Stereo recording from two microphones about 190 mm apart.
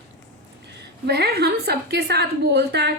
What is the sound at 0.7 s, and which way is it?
A woman's voice, 60° right (ahead or behind).